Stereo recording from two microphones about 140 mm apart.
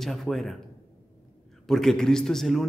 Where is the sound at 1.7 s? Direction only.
Centre (ahead or behind).